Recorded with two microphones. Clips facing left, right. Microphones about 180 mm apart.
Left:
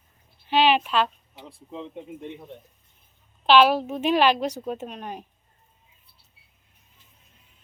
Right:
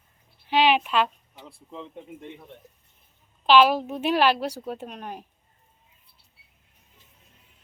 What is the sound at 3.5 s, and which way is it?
A woman's voice, 5° right (ahead or behind).